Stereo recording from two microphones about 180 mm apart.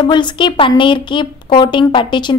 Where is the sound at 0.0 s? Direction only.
25° left (ahead or behind).